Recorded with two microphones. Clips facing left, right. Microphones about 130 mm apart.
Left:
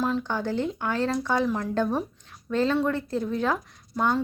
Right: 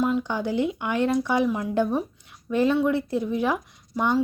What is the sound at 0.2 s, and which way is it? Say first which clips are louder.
Speech: right 2 dB; 15° right (ahead or behind).